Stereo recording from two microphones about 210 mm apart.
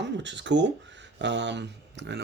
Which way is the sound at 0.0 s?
55° right (ahead or behind).